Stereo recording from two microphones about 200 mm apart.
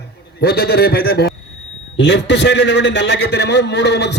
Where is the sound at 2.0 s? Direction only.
60° left (ahead or behind).